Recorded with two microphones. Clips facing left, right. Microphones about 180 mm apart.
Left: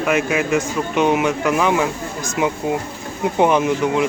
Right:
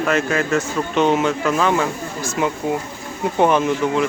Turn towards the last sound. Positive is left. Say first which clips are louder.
# left 1 dB
turn(degrees=15)  # may be behind; listen again after turning